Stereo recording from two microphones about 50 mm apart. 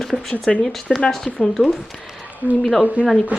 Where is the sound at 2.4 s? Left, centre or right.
Right.